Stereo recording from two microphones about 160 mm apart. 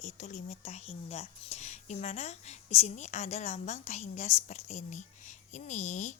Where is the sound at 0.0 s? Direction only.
45° left (ahead or behind).